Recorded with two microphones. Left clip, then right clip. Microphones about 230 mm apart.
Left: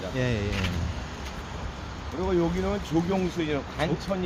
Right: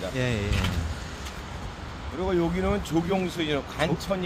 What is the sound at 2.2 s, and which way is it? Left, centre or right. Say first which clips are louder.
Speech: right 1 dB; right.